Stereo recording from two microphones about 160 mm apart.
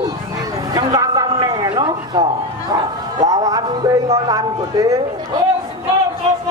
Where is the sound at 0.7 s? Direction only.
25° right (ahead or behind).